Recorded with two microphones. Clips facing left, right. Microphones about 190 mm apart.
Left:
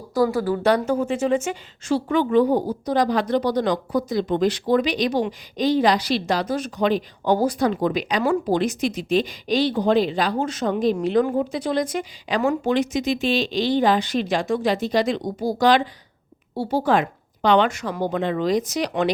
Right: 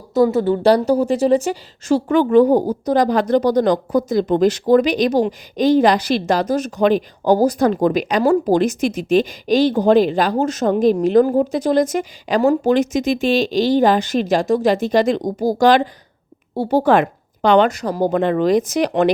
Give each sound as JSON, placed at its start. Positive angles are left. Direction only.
{"t": 0.1, "sound": "a woman's voice", "side_deg": -25}